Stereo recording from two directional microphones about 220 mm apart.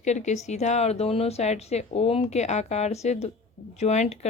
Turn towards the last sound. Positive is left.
turn(degrees=30)  # may be behind; listen again after turning